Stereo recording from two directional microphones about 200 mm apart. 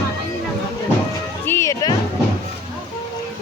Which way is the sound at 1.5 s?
15° left (ahead or behind).